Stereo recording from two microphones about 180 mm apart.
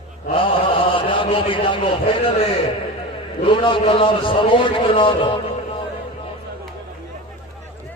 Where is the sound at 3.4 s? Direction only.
30° left (ahead or behind).